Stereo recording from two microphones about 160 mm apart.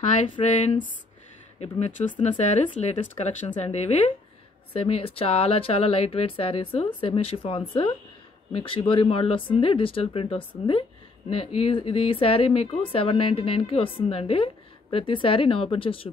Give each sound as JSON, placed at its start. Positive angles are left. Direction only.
{"t": 0.5, "sound": "speech", "side_deg": 50}